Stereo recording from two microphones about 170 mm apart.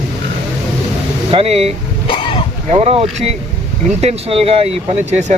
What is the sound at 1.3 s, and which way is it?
Speech, 35° right (ahead or behind).